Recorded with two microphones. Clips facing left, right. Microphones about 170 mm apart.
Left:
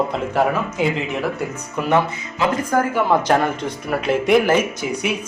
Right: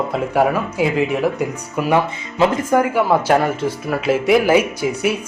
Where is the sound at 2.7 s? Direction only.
20° right (ahead or behind).